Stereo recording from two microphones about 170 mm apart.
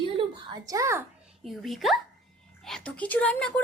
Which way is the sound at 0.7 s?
15° right (ahead or behind).